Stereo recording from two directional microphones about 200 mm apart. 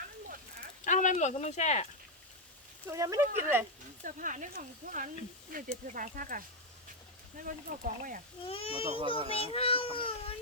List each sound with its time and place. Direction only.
0.9 s speech: 40° left (ahead or behind)
2.8 s speech: 15° right (ahead or behind)
4.0 s speech: 40° right (ahead or behind)
7.4 s speech: 45° right (ahead or behind)
8.4 s speech: 30° left (ahead or behind)
8.9 s a child's voice: 25° right (ahead or behind)
9.3 s speech: 30° left (ahead or behind)